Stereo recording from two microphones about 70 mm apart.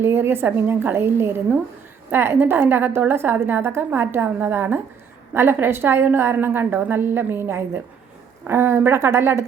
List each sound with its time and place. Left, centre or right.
0.0 s a woman's voice: right